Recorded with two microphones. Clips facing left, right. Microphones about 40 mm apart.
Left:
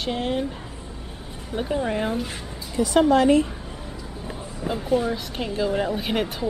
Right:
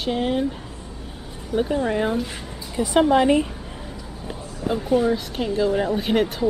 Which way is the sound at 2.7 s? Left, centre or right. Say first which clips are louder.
Right 1 dB; centre.